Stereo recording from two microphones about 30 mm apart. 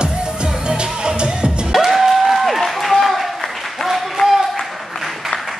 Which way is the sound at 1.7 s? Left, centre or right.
Centre.